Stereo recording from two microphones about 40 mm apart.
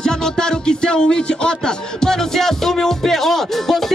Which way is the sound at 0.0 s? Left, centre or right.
Centre.